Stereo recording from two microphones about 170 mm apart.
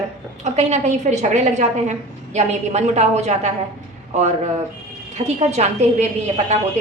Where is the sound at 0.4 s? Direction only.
40° right (ahead or behind).